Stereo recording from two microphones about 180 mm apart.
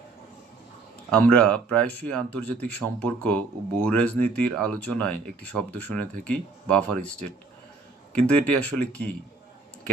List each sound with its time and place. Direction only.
1.1 s speech: 5° left (ahead or behind)